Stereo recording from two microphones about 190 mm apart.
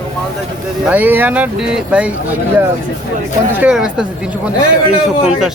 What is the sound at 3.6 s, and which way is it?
Speech, 5° right (ahead or behind).